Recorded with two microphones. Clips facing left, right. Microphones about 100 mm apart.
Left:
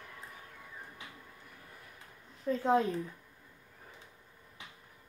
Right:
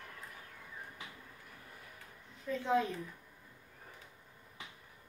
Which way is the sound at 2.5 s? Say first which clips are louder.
Left 4 dB; 40° left (ahead or behind).